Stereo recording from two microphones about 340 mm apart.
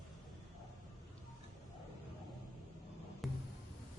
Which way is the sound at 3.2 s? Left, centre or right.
Centre.